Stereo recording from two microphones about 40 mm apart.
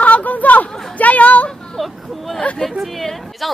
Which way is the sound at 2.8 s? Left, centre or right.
Centre.